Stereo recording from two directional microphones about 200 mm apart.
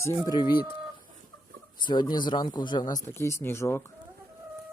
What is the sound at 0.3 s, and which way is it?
Speech, 20° left (ahead or behind).